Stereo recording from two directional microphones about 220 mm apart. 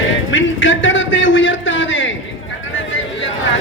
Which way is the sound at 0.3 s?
60° left (ahead or behind).